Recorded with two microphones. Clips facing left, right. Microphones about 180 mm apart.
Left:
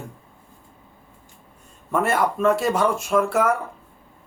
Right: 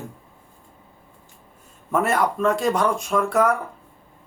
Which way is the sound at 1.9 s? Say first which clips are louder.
Even; centre (ahead or behind).